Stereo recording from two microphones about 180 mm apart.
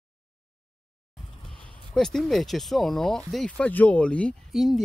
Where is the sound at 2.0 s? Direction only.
5° left (ahead or behind).